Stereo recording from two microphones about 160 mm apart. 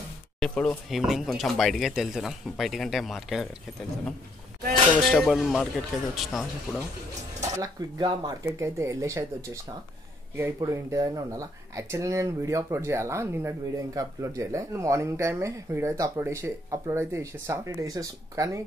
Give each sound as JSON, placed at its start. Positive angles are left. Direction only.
{"t": 0.4, "sound": "speech", "side_deg": 5}
{"t": 5.1, "sound": "speech", "side_deg": 0}
{"t": 7.5, "sound": "speech", "side_deg": -25}